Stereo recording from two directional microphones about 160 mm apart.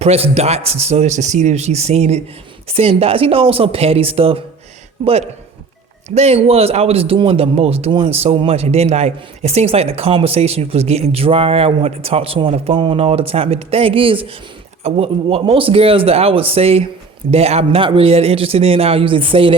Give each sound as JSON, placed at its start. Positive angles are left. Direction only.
{"t": 0.0, "sound": "speech", "side_deg": -40}